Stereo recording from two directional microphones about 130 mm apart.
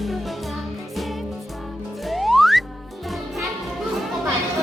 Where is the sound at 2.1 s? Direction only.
Centre (ahead or behind).